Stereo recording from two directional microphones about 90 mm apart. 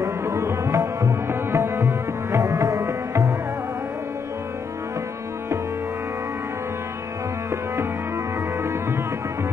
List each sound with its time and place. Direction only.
0.0 s tabla: 35° right (ahead or behind)